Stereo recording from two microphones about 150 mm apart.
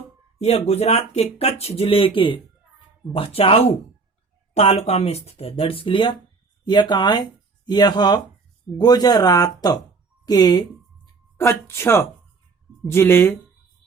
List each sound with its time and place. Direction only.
0.3 s speech: 45° left (ahead or behind); by 13.3 s 15° left (ahead or behind)